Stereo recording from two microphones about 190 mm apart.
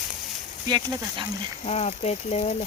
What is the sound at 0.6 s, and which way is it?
Speech, 20° right (ahead or behind).